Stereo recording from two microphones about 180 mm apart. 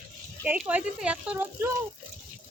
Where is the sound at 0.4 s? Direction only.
10° right (ahead or behind).